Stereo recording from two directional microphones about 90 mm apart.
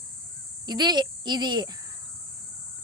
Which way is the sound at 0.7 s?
50° right (ahead or behind).